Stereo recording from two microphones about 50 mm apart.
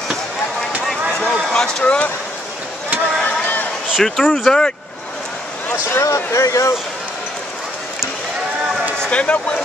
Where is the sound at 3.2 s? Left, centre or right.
Left.